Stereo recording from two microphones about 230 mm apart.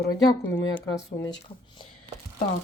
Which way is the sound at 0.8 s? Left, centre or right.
Centre.